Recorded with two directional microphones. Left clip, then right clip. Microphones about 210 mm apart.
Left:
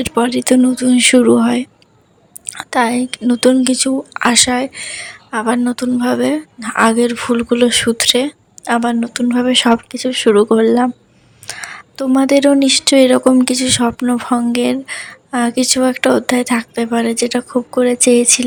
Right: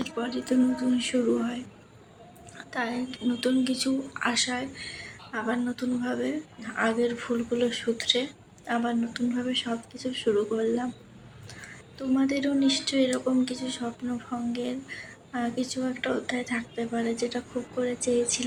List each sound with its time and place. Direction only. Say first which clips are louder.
0.0 s speech: left 16 dB; 50° left (ahead or behind)